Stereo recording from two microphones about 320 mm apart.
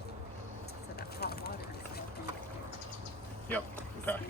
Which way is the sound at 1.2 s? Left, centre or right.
Left.